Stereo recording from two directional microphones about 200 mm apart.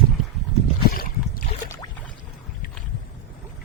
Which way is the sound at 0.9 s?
45° left (ahead or behind).